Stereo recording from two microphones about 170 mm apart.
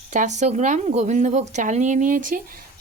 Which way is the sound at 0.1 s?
45° right (ahead or behind).